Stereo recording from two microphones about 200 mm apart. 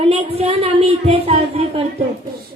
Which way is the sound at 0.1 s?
30° right (ahead or behind).